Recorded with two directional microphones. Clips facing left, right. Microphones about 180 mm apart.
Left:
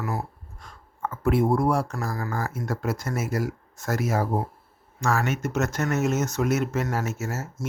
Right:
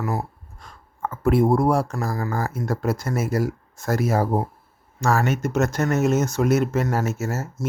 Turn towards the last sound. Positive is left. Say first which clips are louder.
# right 4 dB
turn(degrees=-35)  # may be behind; listen again after turning